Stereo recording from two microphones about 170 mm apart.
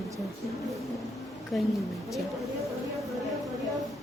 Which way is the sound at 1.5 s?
Centre (ahead or behind).